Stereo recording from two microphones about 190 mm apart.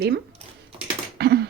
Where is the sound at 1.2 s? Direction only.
55° right (ahead or behind).